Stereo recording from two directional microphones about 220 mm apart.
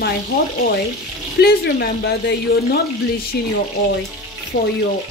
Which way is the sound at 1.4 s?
45° left (ahead or behind).